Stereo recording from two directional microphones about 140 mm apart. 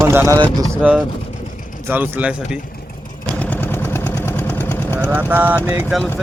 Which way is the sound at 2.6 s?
90° left.